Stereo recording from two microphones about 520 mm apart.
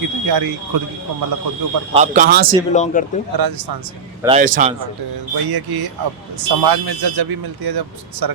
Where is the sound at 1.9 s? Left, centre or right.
Centre.